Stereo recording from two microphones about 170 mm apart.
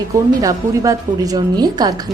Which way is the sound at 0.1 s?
20° right (ahead or behind).